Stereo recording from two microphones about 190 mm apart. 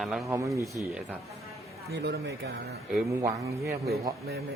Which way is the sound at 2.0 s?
60° right (ahead or behind).